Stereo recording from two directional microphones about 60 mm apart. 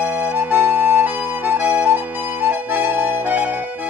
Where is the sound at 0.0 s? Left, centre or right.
Right.